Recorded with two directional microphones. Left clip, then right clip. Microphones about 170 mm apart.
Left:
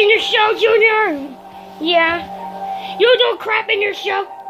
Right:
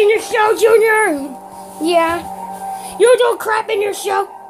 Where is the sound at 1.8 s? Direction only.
15° right (ahead or behind).